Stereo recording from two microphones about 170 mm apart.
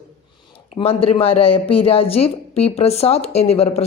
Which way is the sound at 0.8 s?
35° left (ahead or behind).